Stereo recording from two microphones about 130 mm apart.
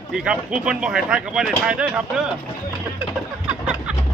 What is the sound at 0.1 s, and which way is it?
Speech, 5° right (ahead or behind).